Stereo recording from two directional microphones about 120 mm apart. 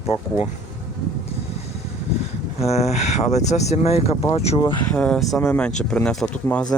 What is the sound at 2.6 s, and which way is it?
Speech, 60° left (ahead or behind).